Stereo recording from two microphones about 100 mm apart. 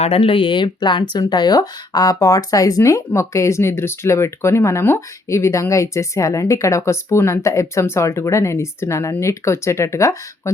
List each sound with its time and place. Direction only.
0.0 s speech: 75° left (ahead or behind); by 10.5 s 30° left (ahead or behind)